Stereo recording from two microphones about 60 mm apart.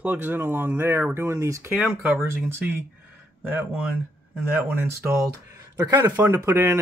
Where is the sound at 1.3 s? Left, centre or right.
Right.